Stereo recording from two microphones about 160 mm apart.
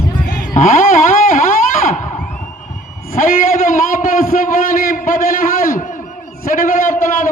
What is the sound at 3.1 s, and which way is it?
A man's voice, 60° left (ahead or behind).